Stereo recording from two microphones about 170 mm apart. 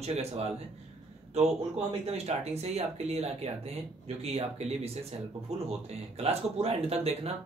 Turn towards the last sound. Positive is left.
turn(degrees=-35)  # may be behind; listen again after turning